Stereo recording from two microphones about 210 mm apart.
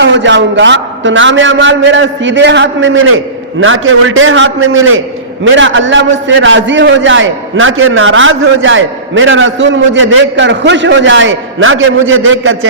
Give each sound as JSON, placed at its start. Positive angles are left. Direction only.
{"t": 0.0, "sound": "a man's voice", "side_deg": -60}